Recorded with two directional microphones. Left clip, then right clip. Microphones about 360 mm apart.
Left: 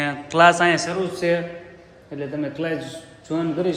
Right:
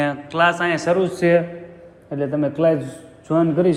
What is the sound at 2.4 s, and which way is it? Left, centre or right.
Speech, centre.